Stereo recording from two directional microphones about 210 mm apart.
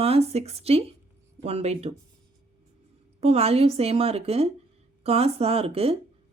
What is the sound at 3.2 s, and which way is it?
Speech, 30° right (ahead or behind).